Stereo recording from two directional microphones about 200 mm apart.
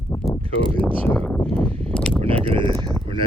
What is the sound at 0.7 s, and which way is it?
Speech, 5° left (ahead or behind).